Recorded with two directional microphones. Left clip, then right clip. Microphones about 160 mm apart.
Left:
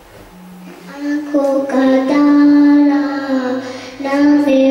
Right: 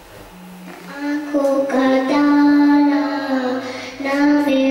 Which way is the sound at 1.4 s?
5° left (ahead or behind).